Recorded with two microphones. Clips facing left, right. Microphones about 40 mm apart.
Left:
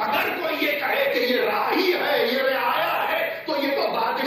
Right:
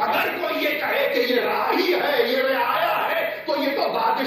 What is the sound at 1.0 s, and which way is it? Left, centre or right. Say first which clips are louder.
A man's voice: right 2 dB; centre.